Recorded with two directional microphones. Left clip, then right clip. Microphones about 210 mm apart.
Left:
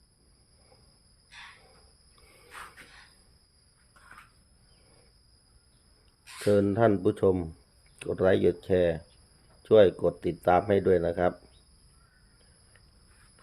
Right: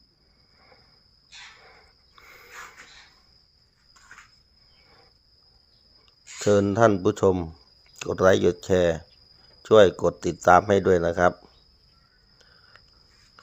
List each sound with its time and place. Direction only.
6.4 s speech: 20° right (ahead or behind)